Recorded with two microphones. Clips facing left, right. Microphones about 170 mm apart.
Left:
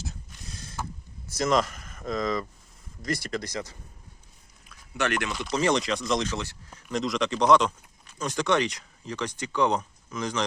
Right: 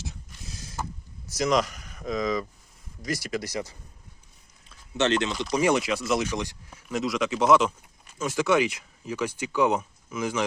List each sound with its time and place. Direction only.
0.0 s mechanisms: centre (ahead or behind)
1.4 s speech: centre (ahead or behind)
4.7 s a sound: 25° right (ahead or behind)
5.3 s speech: 10° right (ahead or behind)